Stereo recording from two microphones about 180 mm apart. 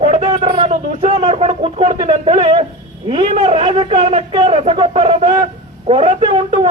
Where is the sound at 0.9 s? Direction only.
30° right (ahead or behind).